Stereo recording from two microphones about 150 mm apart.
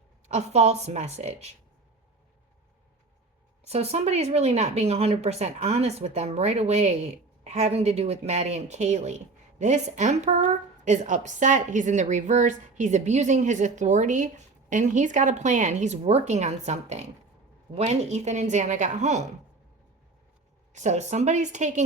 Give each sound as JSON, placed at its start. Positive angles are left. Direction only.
{"t": 0.3, "sound": "a woman's voice", "side_deg": -45}
{"t": 3.7, "sound": "a woman's voice", "side_deg": -45}
{"t": 20.7, "sound": "a woman's voice", "side_deg": -50}